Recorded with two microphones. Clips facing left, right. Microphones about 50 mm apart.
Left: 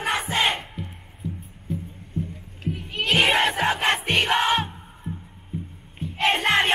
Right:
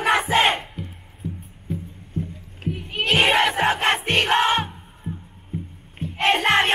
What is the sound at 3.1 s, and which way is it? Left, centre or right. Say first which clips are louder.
Crowd: right 2 dB; centre.